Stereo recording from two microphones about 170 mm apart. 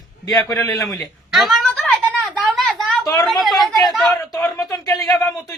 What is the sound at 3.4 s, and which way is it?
Chatter, centre (ahead or behind).